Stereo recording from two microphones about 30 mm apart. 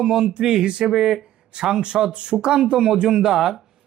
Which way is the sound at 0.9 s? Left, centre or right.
Centre.